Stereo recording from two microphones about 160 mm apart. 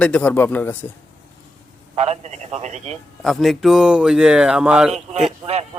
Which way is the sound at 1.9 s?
40° right (ahead or behind).